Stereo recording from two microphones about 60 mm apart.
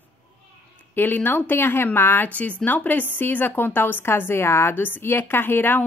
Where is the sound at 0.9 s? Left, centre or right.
Left.